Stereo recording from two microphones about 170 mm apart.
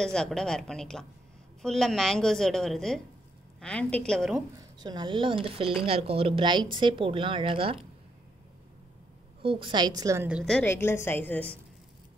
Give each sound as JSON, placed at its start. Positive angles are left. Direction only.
{"t": 0.0, "sound": "a woman's voice", "side_deg": 5}
{"t": 4.7, "sound": "speech", "side_deg": -25}
{"t": 9.4, "sound": "speech", "side_deg": -30}
{"t": 10.4, "sound": "a woman's voice", "side_deg": 5}